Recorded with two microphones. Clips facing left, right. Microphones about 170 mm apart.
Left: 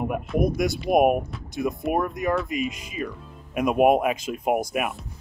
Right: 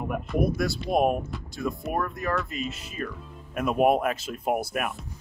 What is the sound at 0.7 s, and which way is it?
Speech, 15° left (ahead or behind).